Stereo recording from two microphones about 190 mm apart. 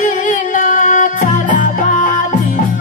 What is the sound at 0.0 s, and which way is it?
Music, 40° left (ahead or behind).